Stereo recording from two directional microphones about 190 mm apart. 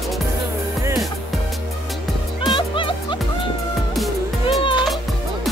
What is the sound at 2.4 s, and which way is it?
Music, 25° left (ahead or behind).